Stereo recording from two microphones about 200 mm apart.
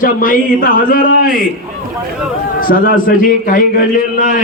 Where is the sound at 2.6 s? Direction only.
45° left (ahead or behind).